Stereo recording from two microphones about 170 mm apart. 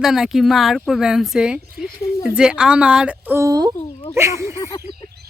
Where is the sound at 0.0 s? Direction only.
Centre (ahead or behind).